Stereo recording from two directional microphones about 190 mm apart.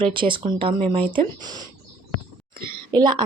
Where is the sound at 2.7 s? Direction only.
25° right (ahead or behind).